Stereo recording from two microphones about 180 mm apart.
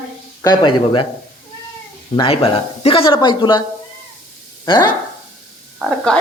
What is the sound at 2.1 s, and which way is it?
Speech, 30° left (ahead or behind).